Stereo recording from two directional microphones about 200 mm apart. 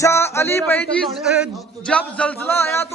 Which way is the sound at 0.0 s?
15° left (ahead or behind).